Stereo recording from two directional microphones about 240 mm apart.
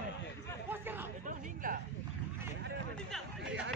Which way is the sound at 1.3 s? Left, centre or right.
Right.